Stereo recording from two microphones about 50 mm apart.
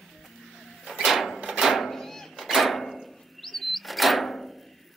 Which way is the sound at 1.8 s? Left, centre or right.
Centre.